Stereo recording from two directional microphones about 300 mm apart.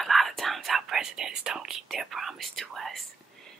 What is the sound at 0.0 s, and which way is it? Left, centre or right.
Whispering, centre.